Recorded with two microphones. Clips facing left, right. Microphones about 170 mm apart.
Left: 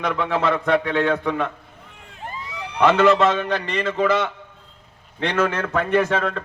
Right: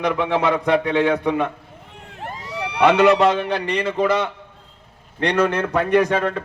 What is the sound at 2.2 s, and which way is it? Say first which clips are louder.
Vehicle: right 4 dB; 75° right (ahead or behind).